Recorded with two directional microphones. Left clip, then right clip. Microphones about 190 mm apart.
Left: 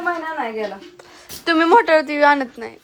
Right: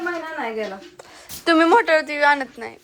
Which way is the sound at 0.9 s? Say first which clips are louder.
Left 1 dB; 10° left (ahead or behind).